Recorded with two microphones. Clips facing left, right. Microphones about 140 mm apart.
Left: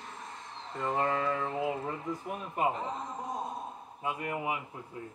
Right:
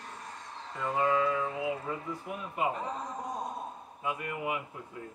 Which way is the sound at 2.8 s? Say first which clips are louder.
Even; 25° left (ahead or behind).